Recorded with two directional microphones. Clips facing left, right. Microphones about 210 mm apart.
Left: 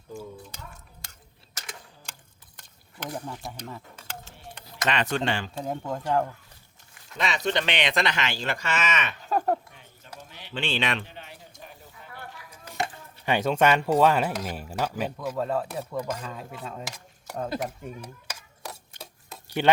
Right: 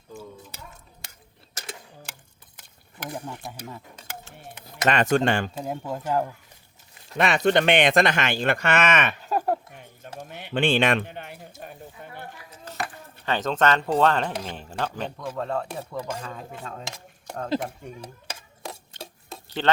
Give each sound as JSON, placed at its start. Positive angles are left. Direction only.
{"t": 0.1, "sound": "speech", "side_deg": -5}
{"t": 2.6, "sound": "stir", "side_deg": -5}
{"t": 3.6, "sound": "a sound", "side_deg": -10}
{"t": 4.6, "sound": "speech", "side_deg": -45}
{"t": 5.5, "sound": "speech", "side_deg": -5}
{"t": 7.2, "sound": "speech", "side_deg": -55}
{"t": 9.2, "sound": "a sound", "side_deg": -5}
{"t": 10.2, "sound": "a sound", "side_deg": -55}
{"t": 13.2, "sound": "speech", "side_deg": 10}
{"t": 18.0, "sound": "stir", "side_deg": -25}
{"t": 19.5, "sound": "speech", "side_deg": 10}